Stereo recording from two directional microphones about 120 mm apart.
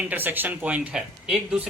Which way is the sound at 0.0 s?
15° right (ahead or behind).